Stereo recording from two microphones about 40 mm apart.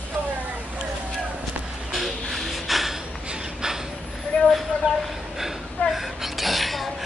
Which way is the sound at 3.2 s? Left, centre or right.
Centre.